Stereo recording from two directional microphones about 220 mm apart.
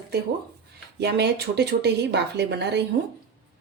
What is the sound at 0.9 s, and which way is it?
A woman's voice, 50° right (ahead or behind).